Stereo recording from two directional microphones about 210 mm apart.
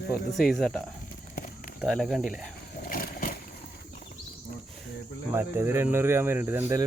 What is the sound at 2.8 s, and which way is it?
Vehicle, 40° left (ahead or behind).